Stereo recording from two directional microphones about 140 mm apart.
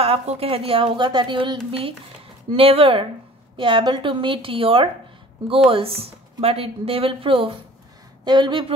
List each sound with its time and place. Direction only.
0.0 s a woman's voice: 45° right (ahead or behind)